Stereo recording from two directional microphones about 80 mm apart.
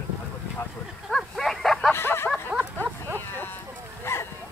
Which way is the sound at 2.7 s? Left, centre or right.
Right.